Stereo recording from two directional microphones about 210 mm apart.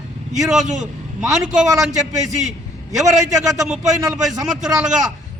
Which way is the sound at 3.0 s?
Centre (ahead or behind).